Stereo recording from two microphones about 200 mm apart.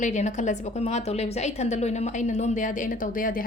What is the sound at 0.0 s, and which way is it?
A woman's voice, 35° left (ahead or behind).